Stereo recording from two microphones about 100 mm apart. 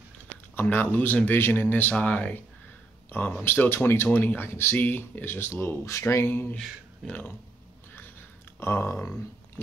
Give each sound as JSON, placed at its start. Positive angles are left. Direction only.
{"t": 0.6, "sound": "speech", "side_deg": 20}
{"t": 8.5, "sound": "speech", "side_deg": 25}